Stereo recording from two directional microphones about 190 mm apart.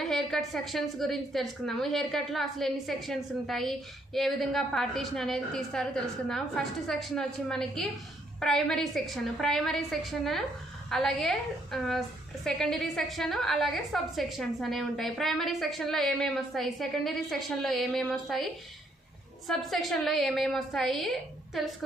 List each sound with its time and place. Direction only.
0.0 s a woman's voice: centre (ahead or behind)